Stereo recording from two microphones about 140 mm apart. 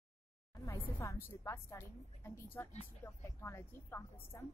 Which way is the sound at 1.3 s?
20° left (ahead or behind).